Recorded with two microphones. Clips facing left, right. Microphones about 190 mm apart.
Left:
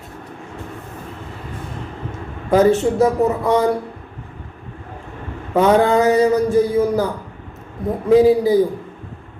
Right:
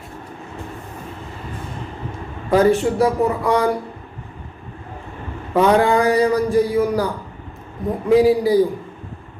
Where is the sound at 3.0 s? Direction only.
20° left (ahead or behind).